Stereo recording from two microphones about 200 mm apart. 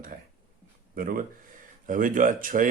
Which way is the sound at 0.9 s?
45° right (ahead or behind).